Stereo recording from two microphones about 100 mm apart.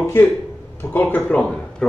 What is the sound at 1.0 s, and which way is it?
Speech, 15° left (ahead or behind).